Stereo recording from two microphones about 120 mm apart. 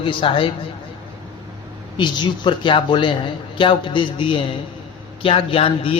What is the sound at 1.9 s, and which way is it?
A man's voice, 40° left (ahead or behind).